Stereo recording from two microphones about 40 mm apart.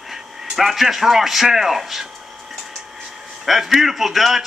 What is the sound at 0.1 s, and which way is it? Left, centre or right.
A man's voice, centre.